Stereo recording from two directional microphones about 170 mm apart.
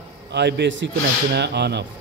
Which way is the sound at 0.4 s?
85° right.